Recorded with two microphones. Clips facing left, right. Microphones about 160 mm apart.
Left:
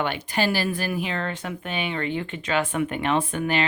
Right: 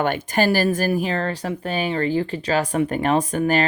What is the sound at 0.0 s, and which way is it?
Speech, 45° right (ahead or behind).